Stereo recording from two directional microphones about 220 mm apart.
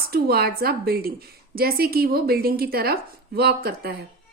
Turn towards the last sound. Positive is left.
turn(degrees=-45)  # may be behind; listen again after turning